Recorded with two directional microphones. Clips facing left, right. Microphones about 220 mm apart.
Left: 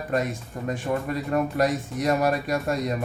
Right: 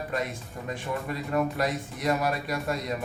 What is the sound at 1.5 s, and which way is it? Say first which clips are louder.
Speech: left 6 dB; 45° left (ahead or behind).